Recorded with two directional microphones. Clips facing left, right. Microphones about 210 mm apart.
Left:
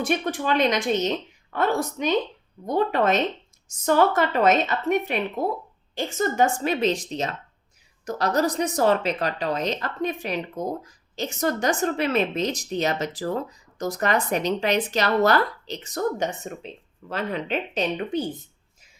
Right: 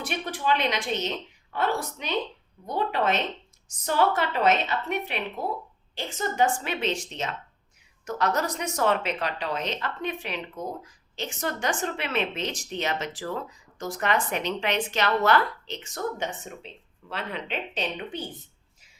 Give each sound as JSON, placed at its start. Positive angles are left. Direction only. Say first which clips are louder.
{"t": 0.0, "sound": "a woman's voice", "louder": "left 5 dB", "side_deg": 45}